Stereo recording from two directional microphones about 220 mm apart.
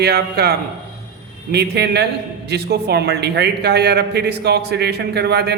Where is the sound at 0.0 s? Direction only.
45° right (ahead or behind).